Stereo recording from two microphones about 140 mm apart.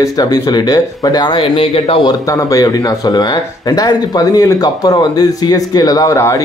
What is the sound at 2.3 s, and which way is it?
Speech, 25° left (ahead or behind).